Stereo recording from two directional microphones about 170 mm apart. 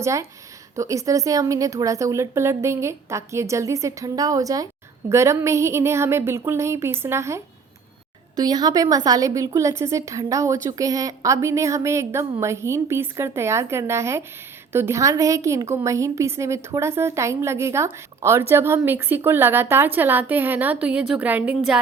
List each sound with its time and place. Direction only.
0.0 s a woman's voice: 15° right (ahead or behind)